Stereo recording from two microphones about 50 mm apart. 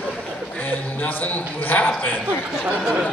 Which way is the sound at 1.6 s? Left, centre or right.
Left.